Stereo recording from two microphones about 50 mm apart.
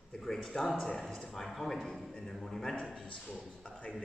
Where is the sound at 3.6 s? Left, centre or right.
Left.